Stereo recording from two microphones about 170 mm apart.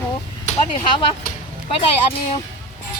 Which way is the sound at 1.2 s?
55° left (ahead or behind).